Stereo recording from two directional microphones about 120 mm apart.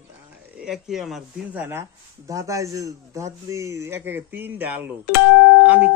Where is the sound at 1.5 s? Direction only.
20° right (ahead or behind).